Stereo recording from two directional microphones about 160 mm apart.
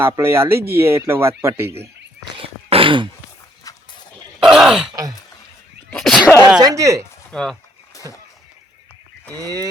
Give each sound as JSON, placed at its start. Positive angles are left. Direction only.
{"t": 0.0, "sound": "speech", "side_deg": -15}
{"t": 2.3, "sound": "a sound", "side_deg": -35}
{"t": 4.4, "sound": "speech", "side_deg": -5}
{"t": 5.9, "sound": "sneeze", "side_deg": 0}
{"t": 6.6, "sound": "speech", "side_deg": -20}
{"t": 7.3, "sound": "speech", "side_deg": 5}
{"t": 7.9, "sound": "a sound", "side_deg": 20}
{"t": 9.4, "sound": "speech", "side_deg": -25}